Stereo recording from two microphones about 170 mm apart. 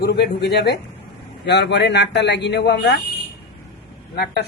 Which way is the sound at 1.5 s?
90° left.